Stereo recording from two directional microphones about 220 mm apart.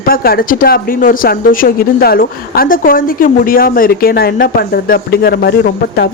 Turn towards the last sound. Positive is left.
turn(degrees=45)  # may be behind; listen again after turning